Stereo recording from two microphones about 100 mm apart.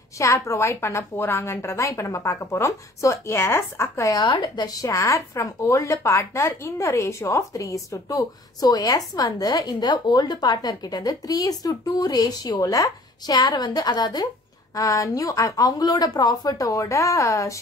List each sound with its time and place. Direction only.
0.2 s a woman's voice: 30° left (ahead or behind)
4.8 s speech: 30° left (ahead or behind)